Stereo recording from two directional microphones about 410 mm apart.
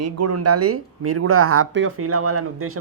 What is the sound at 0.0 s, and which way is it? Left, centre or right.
Speech, right.